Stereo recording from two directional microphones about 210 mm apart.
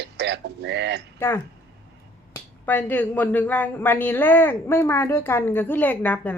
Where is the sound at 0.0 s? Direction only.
55° right (ahead or behind).